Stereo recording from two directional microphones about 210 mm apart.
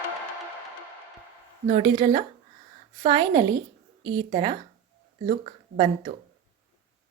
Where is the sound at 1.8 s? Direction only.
25° right (ahead or behind).